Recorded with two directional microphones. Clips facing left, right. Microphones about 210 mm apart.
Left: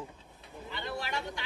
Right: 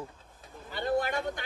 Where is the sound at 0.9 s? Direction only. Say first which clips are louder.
Right 8 dB; 50° right (ahead or behind).